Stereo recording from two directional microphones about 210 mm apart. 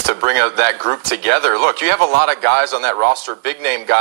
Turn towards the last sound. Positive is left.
turn(degrees=-50)  # may be behind; listen again after turning